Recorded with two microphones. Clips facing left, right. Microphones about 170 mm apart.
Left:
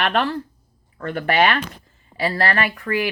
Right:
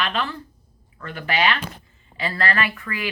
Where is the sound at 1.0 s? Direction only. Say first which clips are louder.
Left 6 dB; 50° left (ahead or behind).